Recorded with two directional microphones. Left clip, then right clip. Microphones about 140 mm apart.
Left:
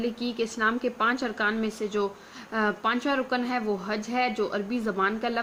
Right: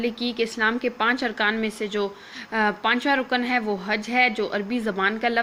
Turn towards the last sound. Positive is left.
turn(degrees=-15)  # may be behind; listen again after turning